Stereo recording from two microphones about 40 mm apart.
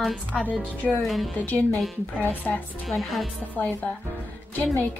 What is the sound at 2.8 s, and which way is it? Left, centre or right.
Speech, centre.